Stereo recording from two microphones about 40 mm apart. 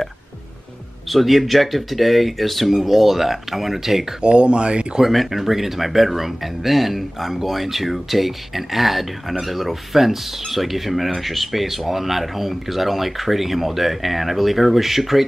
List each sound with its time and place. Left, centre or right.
1.0 s speech: centre
4.2 s speech: right
5.0 s speech: centre